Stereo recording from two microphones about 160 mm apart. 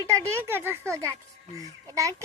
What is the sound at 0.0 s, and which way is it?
A child's voice, 20° right (ahead or behind).